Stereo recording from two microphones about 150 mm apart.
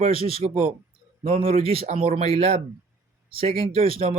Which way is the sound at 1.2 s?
65° right (ahead or behind).